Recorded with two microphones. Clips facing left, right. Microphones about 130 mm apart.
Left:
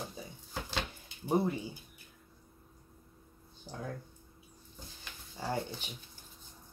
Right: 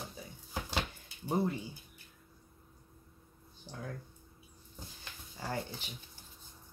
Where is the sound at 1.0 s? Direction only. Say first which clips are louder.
Left 4 dB; 10° left (ahead or behind).